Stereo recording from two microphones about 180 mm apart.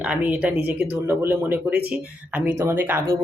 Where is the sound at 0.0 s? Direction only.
10° right (ahead or behind).